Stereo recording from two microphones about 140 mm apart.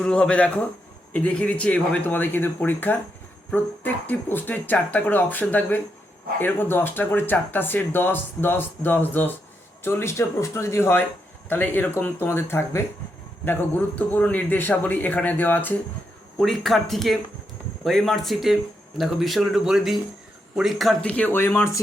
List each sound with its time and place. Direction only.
0.0 s speech: 5° left (ahead or behind)
16.4 s speech: centre (ahead or behind); by 21.8 s 20° left (ahead or behind)